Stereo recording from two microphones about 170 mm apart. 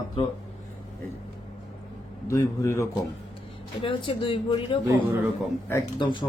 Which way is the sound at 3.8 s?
30° left (ahead or behind).